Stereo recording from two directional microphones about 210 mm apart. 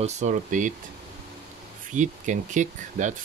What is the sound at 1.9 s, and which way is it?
Speech, 35° right (ahead or behind).